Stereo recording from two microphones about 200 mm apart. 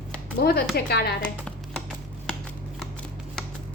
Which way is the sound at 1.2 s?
5° left (ahead or behind).